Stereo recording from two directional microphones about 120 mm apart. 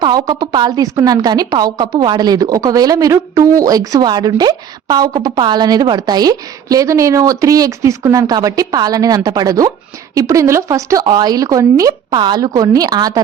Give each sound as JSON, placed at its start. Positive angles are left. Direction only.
{"t": 0.0, "sound": "a woman's voice", "side_deg": -35}